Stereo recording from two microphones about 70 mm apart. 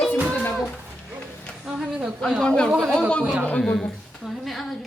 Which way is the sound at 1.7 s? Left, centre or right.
Centre.